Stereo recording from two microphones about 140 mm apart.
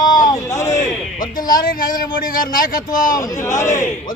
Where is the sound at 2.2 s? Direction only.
85° left.